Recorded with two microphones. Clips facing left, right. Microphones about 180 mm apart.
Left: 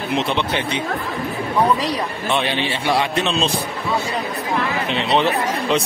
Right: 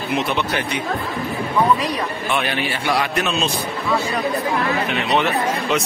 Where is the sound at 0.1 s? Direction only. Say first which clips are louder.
Even; 25° left (ahead or behind).